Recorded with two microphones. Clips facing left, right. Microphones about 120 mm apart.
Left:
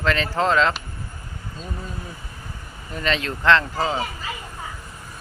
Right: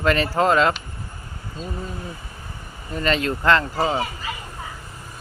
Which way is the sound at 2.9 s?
5° right (ahead or behind).